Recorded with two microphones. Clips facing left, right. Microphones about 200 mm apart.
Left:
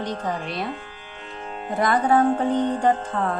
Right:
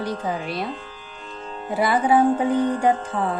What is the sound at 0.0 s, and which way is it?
Speech, 10° right (ahead or behind).